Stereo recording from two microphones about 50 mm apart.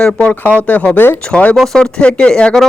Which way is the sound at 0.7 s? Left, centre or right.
Left.